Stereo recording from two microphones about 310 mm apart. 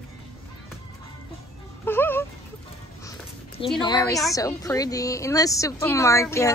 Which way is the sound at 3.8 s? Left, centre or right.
Centre.